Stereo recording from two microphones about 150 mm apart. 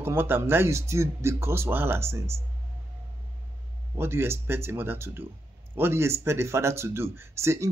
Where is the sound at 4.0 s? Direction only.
15° right (ahead or behind).